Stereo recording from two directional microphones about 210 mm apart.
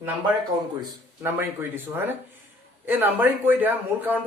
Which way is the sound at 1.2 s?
10° right (ahead or behind).